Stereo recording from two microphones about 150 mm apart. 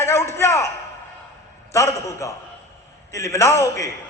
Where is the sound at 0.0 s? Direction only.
15° left (ahead or behind).